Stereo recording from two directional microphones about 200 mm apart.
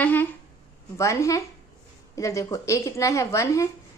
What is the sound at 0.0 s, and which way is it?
A woman's voice, 10° left (ahead or behind).